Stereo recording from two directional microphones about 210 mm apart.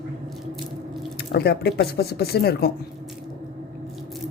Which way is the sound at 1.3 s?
50° left (ahead or behind).